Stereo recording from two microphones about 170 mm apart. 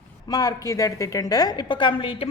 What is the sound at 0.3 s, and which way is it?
A woman's voice, 20° left (ahead or behind).